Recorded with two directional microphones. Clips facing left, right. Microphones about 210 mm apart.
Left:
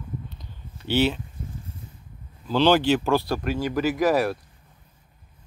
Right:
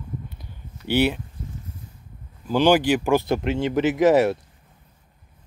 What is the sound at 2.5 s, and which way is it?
Speech, 15° right (ahead or behind).